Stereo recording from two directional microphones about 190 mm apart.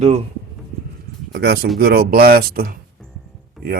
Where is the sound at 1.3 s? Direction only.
60° right (ahead or behind).